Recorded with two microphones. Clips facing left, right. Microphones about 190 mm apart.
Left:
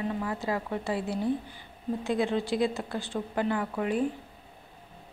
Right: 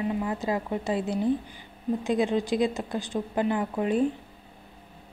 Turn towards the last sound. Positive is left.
turn(degrees=-25)  # may be behind; listen again after turning